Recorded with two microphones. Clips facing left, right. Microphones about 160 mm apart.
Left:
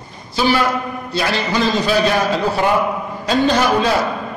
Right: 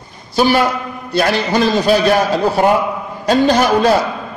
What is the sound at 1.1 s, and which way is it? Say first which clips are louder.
Speech: right 5 dB; 50° right (ahead or behind).